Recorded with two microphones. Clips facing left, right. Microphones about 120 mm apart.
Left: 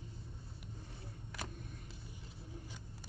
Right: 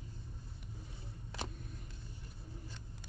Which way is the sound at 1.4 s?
25° right (ahead or behind).